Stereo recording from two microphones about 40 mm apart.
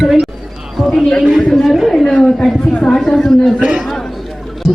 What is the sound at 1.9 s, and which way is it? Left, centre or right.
A man's voice, centre.